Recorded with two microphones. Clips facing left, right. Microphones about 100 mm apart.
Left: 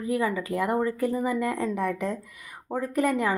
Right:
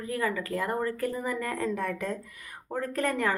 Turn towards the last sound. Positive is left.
turn(degrees=10)  # may be behind; listen again after turning